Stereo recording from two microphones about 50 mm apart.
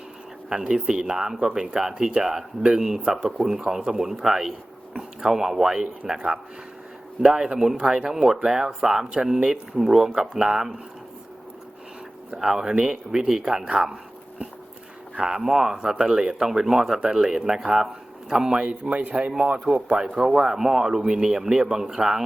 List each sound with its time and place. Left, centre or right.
0.5 s speech: centre
12.4 s speech: centre
13.7 s a sound: centre
15.1 s speech: centre
18.6 s speech: right